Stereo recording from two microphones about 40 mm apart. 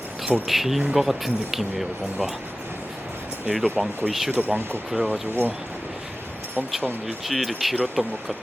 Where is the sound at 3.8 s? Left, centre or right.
Centre.